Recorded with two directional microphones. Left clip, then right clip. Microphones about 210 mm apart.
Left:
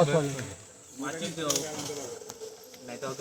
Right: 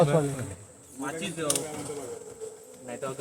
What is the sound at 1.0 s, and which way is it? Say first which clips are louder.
Speech: right 1 dB; 20° right (ahead or behind).